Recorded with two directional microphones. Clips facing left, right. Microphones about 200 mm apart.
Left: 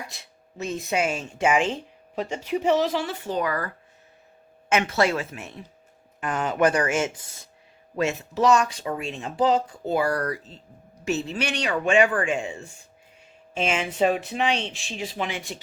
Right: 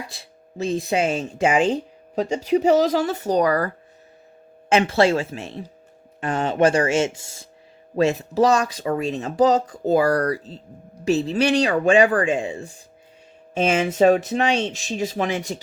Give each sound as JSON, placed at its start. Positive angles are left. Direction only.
{"t": 0.1, "sound": "speech", "side_deg": -30}
{"t": 4.7, "sound": "speech", "side_deg": -30}